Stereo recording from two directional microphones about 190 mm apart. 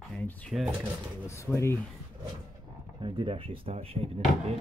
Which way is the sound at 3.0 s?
25° right (ahead or behind).